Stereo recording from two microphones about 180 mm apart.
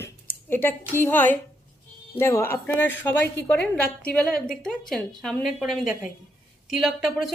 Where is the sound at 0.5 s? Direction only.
10° left (ahead or behind).